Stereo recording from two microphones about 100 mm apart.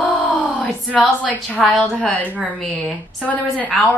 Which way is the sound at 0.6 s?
10° left (ahead or behind).